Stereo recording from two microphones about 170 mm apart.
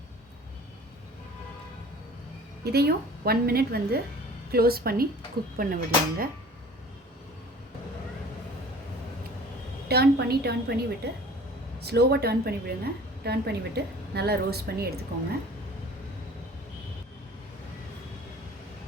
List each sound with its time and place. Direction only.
2.7 s a woman's voice: 65° right (ahead or behind)
9.9 s a woman's voice: 70° right (ahead or behind)